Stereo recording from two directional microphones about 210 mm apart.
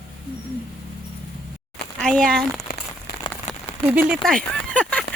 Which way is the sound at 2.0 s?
5° left (ahead or behind).